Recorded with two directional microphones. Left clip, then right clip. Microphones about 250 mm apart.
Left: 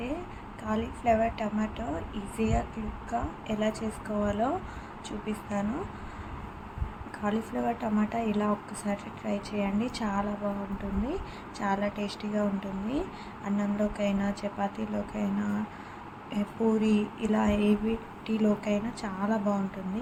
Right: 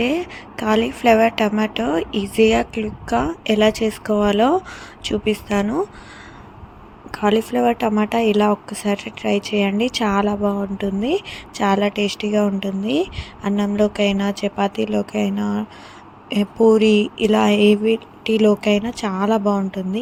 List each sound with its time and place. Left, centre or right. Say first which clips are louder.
0.0 s speech: right 15 dB; right
7.1 s speech: right 14 dB; right